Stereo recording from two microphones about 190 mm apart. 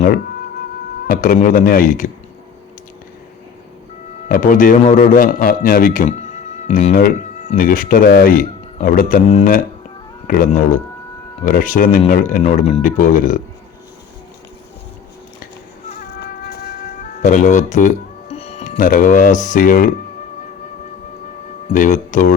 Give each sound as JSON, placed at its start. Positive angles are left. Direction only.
{"t": 1.0, "sound": "speech", "side_deg": 45}
{"t": 4.3, "sound": "speech", "side_deg": 45}
{"t": 16.0, "sound": "music", "side_deg": 55}
{"t": 18.8, "sound": "speech", "side_deg": 45}
{"t": 21.7, "sound": "speech", "side_deg": 40}